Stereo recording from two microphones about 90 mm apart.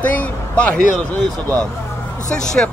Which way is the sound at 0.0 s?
15° left (ahead or behind).